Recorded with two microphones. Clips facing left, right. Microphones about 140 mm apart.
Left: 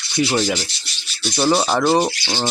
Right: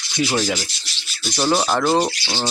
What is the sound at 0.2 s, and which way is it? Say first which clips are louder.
Speech: left 2 dB; 5° right (ahead or behind).